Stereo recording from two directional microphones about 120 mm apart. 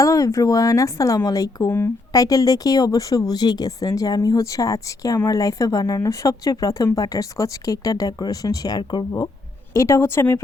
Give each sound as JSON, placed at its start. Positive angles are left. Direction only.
{"t": 0.0, "sound": "speech", "side_deg": 25}
{"t": 1.7, "sound": "speech", "side_deg": 20}
{"t": 2.2, "sound": "speech", "side_deg": 30}
{"t": 9.7, "sound": "speech", "side_deg": 25}